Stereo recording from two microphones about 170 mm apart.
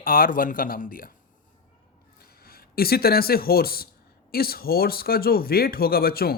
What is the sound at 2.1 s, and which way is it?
Speech, 65° left (ahead or behind).